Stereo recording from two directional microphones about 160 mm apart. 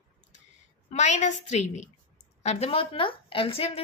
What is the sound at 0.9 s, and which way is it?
A woman's voice, 50° left (ahead or behind).